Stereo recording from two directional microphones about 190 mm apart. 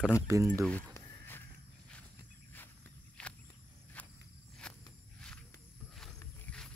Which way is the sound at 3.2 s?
5° left (ahead or behind).